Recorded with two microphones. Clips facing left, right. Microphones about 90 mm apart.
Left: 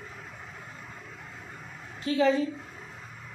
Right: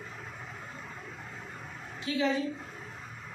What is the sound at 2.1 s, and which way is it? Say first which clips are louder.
Speech: left 5 dB; 45° left (ahead or behind).